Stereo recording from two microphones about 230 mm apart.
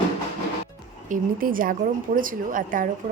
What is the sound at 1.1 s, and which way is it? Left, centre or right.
A woman's voice, right.